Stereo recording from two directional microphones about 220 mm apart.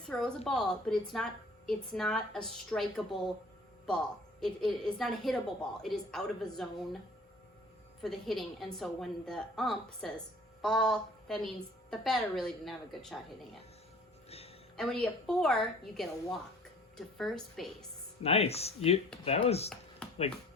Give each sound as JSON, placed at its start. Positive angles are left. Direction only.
{"t": 0.1, "sound": "a woman's voice", "side_deg": 0}
{"t": 8.0, "sound": "a woman's voice", "side_deg": 0}
{"t": 14.3, "sound": "a sound", "side_deg": 25}
{"t": 14.8, "sound": "a woman's voice", "side_deg": 0}
{"t": 18.2, "sound": "speech", "side_deg": 25}
{"t": 20.0, "sound": "a sound", "side_deg": 5}